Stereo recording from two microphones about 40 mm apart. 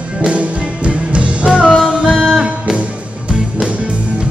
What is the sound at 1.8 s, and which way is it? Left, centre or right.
Music, centre.